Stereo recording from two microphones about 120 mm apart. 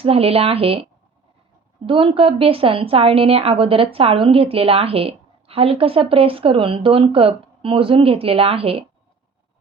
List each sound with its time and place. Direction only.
0.0 s a woman's voice: 55° right (ahead or behind)
1.9 s a woman's voice: 50° right (ahead or behind)